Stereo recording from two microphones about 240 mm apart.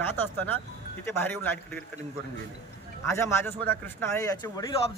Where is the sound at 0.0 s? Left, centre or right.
Centre.